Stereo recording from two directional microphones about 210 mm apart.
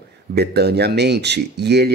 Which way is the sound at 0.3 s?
50° right (ahead or behind).